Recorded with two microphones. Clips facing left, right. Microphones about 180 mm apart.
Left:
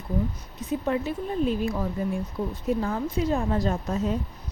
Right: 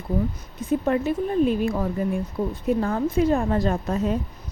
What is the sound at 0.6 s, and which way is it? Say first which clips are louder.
A woman's voice: right 4 dB; 50° right (ahead or behind).